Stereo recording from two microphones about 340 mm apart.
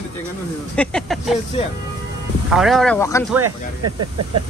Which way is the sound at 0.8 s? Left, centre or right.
Centre.